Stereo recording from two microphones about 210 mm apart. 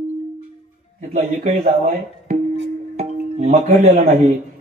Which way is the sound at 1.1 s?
40° right (ahead or behind).